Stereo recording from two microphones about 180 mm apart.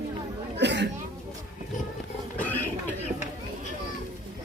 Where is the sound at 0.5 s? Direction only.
70° right (ahead or behind).